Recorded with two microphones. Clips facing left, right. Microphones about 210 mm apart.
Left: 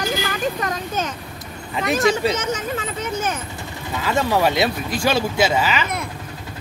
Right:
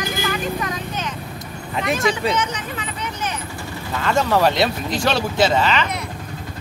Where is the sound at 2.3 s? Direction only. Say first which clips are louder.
Left 1 dB; 45° left (ahead or behind).